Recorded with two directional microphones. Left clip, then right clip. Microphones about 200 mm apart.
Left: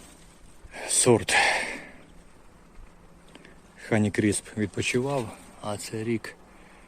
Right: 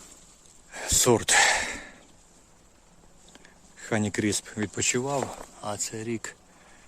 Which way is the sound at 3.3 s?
Centre (ahead or behind).